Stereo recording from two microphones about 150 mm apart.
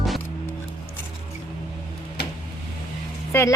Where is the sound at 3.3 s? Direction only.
20° left (ahead or behind).